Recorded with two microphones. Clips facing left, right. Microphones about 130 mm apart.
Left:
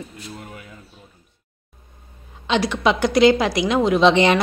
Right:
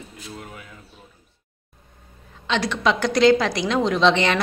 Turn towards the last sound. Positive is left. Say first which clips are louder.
# left 4 dB
turn(degrees=15)  # may be behind; listen again after turning